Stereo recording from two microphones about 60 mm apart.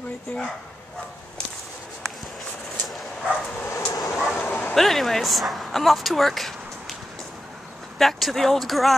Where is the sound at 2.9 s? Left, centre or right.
Centre.